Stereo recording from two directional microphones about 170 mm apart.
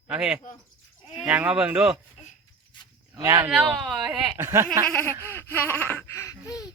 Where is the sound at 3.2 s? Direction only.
15° right (ahead or behind).